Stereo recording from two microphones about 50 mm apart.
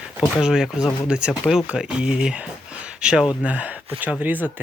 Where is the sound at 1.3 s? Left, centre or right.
Centre.